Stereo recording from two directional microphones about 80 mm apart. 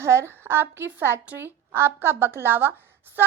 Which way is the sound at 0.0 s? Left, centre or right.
Right.